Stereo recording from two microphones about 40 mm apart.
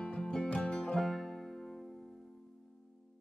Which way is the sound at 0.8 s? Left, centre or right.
Centre.